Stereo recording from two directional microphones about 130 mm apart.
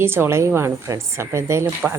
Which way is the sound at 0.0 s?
20° right (ahead or behind).